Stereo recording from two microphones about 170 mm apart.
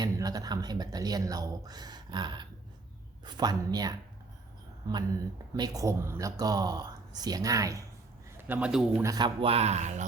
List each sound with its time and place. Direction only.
0.0 s speech: 20° right (ahead or behind)
5.5 s a man's voice: 20° right (ahead or behind); by 9.0 s 5° right (ahead or behind)
9.0 s a man's voice: 25° right (ahead or behind)